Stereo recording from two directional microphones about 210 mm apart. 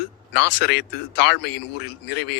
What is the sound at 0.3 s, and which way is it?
Speech, 55° left (ahead or behind).